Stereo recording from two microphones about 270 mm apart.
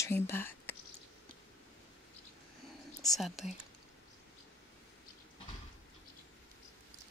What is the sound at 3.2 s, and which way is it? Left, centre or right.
Speech, centre.